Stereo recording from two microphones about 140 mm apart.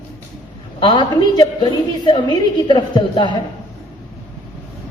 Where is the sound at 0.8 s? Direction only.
35° left (ahead or behind).